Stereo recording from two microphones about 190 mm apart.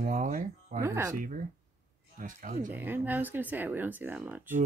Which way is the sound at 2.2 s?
45° right (ahead or behind).